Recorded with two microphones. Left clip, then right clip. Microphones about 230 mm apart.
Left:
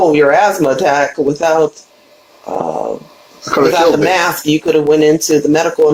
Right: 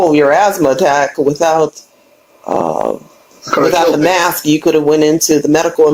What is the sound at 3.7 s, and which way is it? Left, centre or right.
Speech, right.